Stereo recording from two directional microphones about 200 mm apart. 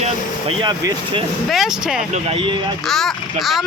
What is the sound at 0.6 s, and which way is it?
Speech, 20° right (ahead or behind).